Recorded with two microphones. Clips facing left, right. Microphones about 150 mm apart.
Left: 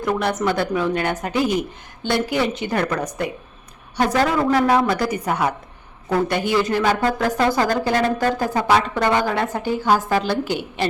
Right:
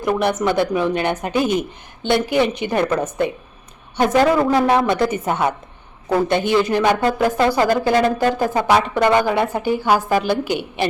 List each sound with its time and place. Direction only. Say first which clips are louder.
0.0 s a woman's voice: right 2 dB; 20° right (ahead or behind)